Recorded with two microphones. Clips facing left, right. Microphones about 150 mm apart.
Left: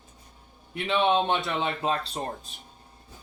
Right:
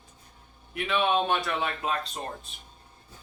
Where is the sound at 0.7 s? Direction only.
25° left (ahead or behind).